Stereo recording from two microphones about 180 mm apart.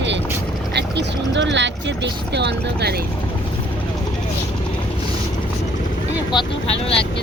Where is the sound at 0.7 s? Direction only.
80° right.